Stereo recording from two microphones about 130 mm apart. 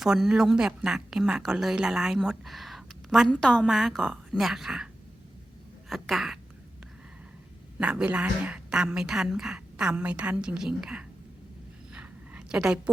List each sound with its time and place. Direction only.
0.0 s speech: 5° right (ahead or behind)
5.9 s speech: centre (ahead or behind)
7.8 s a woman's voice: 10° right (ahead or behind)
11.9 s a sound: 10° right (ahead or behind)